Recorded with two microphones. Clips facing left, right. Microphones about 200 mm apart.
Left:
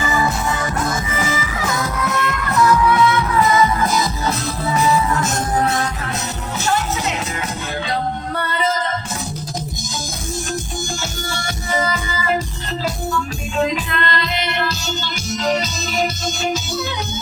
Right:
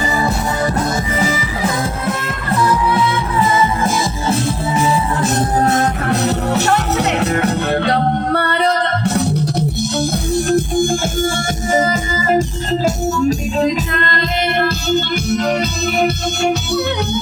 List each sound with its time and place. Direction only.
0.0 s music: 35° right (ahead or behind)
5.5 s music: 50° right (ahead or behind); by 9.6 s 65° right (ahead or behind)
10.3 s music: 55° right (ahead or behind)
11.7 s music: 45° right (ahead or behind); by 16.8 s 65° right (ahead or behind)